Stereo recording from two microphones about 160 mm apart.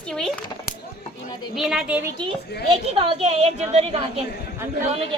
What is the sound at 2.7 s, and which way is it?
A woman's voice, 35° right (ahead or behind).